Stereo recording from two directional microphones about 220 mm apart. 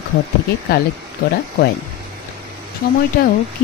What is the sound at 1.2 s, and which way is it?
Speech, 40° left (ahead or behind).